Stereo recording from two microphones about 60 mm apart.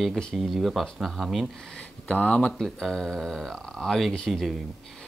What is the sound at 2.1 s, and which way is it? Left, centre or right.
Speech, left.